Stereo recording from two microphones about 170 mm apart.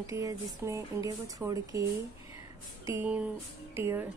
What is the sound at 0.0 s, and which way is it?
Speech, 20° right (ahead or behind).